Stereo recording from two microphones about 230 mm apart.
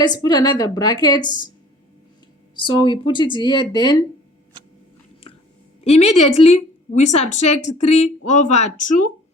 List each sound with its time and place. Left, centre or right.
0.0 s a woman's voice: centre
2.6 s a woman's voice: centre
5.8 s a woman's voice: left